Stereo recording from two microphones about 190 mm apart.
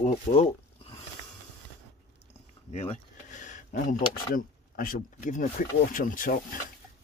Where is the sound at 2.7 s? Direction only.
35° left (ahead or behind).